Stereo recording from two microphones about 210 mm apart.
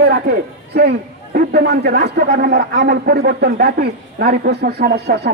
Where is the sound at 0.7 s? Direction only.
50° right (ahead or behind).